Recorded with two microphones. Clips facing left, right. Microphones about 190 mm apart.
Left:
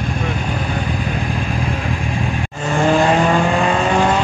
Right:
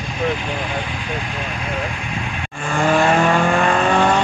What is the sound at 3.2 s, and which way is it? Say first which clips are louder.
Vehicle: left 1 dB; 15° left (ahead or behind).